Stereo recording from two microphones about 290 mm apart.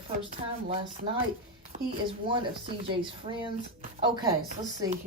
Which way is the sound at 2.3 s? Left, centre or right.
Centre.